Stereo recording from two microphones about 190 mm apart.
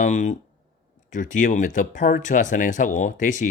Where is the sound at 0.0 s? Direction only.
40° left (ahead or behind).